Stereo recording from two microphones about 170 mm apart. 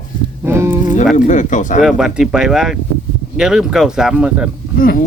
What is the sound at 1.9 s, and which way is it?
Speech, 5° right (ahead or behind).